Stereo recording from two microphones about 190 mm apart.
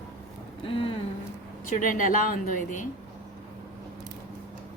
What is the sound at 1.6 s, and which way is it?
A woman's voice, 45° left (ahead or behind).